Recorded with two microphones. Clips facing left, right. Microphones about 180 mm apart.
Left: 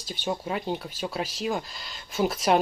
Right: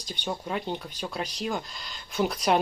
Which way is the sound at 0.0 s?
5° left (ahead or behind).